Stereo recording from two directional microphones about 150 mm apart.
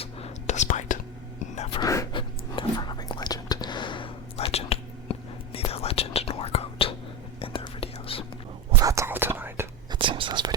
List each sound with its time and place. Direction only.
0.0 s whispering: 45° left (ahead or behind)
1.8 s a sound: 20° left (ahead or behind)
2.1 s whispering: 30° left (ahead or behind)
8.7 s whispering: 20° right (ahead or behind)
9.9 s whispering: 35° right (ahead or behind)